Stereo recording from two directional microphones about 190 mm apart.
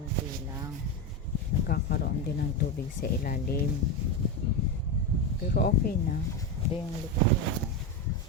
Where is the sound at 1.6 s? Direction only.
55° left (ahead or behind).